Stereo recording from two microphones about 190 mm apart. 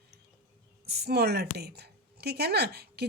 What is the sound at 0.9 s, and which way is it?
A woman's voice, 60° right (ahead or behind).